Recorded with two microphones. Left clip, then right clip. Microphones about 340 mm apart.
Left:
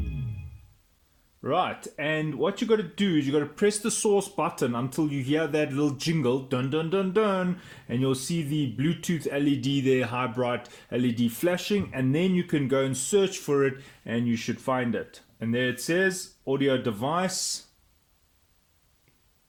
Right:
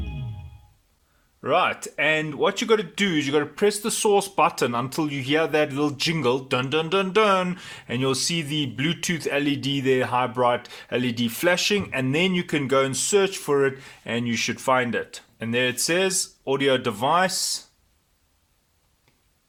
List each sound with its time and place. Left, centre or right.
1.4 s speech: right